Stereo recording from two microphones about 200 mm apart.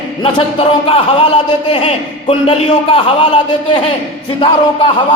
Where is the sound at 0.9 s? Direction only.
30° left (ahead or behind).